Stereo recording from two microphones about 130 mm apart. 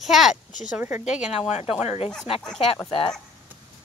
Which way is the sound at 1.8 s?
55° left (ahead or behind).